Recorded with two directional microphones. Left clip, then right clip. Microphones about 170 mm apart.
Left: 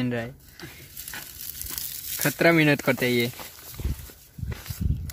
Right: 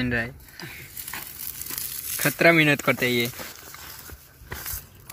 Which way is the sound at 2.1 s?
25° left (ahead or behind).